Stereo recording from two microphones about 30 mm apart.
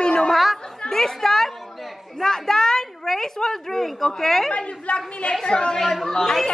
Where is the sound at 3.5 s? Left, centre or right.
Centre.